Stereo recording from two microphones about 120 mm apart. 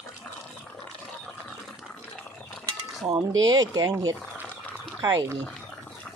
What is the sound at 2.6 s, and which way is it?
Cutlery, 30° right (ahead or behind).